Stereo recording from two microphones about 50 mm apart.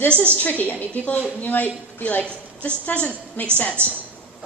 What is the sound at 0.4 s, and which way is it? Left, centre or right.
A woman's voice, left.